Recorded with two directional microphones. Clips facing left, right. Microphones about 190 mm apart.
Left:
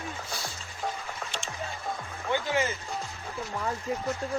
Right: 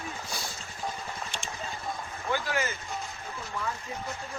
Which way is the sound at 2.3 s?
25° left (ahead or behind).